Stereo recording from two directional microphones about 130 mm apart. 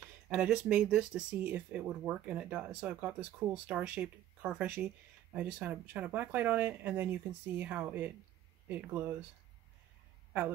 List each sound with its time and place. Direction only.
0.3 s speech: 10° right (ahead or behind)